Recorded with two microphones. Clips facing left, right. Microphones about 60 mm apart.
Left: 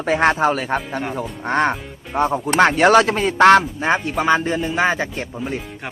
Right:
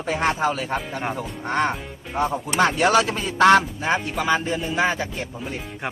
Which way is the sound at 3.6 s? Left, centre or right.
Left.